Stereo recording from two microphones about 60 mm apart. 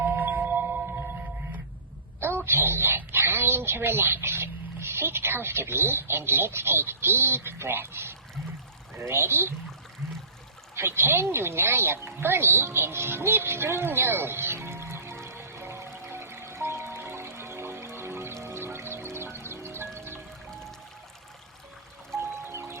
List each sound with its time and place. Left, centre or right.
0.0 s singing bowl: right
2.2 s speech: right
10.8 s a sound: right
18.4 s music: right
22.2 s music: right